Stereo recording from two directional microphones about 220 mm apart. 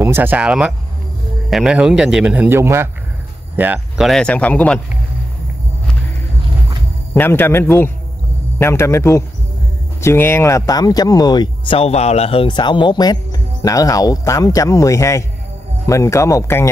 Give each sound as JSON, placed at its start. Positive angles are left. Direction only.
{"t": 0.0, "sound": "a man's voice", "side_deg": -10}
{"t": 7.2, "sound": "speech", "side_deg": 10}